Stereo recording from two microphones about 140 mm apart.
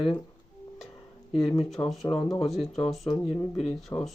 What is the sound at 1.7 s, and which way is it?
Speech, centre (ahead or behind).